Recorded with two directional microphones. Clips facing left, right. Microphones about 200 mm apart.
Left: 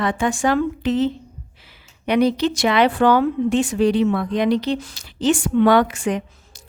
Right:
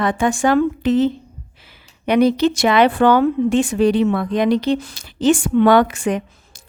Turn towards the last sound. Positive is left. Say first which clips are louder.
# right 2 dB
turn(degrees=-55)  # may be behind; listen again after turning